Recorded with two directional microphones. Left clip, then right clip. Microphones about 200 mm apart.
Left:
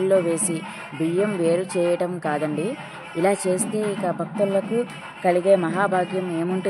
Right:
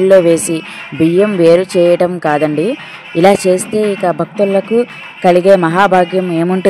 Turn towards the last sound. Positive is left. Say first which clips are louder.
# right 12 dB
turn(degrees=-45)  # may be behind; listen again after turning